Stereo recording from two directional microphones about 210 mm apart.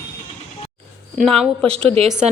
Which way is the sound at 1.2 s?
Centre (ahead or behind).